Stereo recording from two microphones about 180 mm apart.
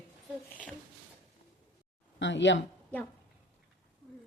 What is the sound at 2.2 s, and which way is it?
Speech, 85° left.